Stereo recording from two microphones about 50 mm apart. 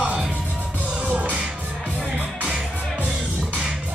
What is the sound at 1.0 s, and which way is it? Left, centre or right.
Music, right.